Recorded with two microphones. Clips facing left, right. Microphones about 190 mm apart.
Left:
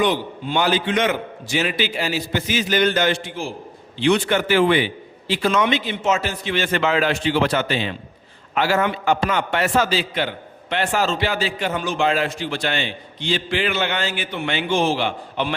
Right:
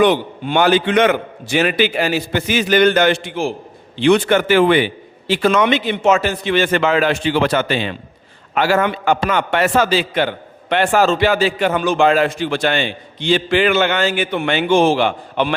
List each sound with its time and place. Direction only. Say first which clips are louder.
0.0 s a man's voice: right 6 dB; 65° right (ahead or behind)
4.0 s a man's voice: right 5 dB; 60° right (ahead or behind)
7.4 s a man's voice: right 4 dB; 70° right (ahead or behind)